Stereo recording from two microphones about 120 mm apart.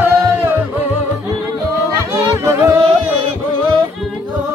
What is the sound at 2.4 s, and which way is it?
Music, 25° right (ahead or behind).